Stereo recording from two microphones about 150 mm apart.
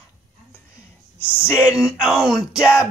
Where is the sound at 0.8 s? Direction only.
15° left (ahead or behind).